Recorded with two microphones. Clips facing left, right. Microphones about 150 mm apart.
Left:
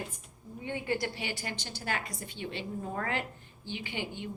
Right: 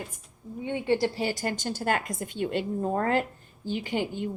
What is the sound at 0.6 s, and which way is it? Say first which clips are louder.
A woman's voice: right 7 dB; 25° right (ahead or behind).